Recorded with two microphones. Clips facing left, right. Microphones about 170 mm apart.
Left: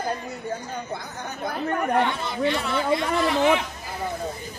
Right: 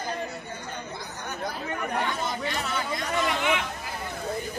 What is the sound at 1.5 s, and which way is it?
Speech, 55° left (ahead or behind).